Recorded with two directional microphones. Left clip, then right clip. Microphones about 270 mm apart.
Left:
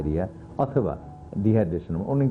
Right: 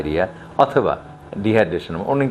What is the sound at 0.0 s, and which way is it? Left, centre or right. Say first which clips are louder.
Speech: right 8 dB; centre.